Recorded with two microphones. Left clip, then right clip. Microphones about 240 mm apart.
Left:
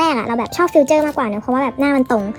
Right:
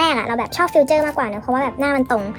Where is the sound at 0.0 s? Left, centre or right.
Centre.